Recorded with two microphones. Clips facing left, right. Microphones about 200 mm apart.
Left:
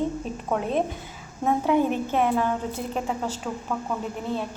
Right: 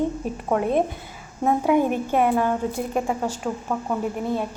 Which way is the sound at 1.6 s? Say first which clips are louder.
Right 2 dB; 10° right (ahead or behind).